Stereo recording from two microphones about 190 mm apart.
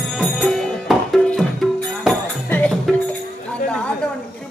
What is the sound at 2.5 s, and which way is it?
Music, 5° left (ahead or behind).